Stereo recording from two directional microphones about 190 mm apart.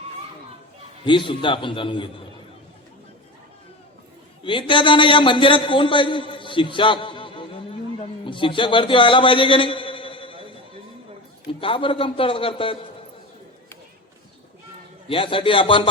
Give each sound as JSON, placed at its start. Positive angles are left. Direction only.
{"t": 1.0, "sound": "a man's voice", "side_deg": 25}
{"t": 4.4, "sound": "a man's voice", "side_deg": 25}
{"t": 11.6, "sound": "a man's voice", "side_deg": 25}
{"t": 15.0, "sound": "a man's voice", "side_deg": 30}